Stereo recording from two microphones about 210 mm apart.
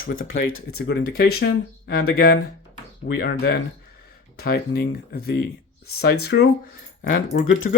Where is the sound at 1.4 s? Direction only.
50° left (ahead or behind).